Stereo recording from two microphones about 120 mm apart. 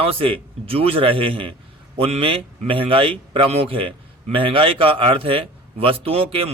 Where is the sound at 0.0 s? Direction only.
50° right (ahead or behind).